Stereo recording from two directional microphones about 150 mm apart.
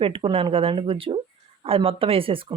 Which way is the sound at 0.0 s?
35° right (ahead or behind).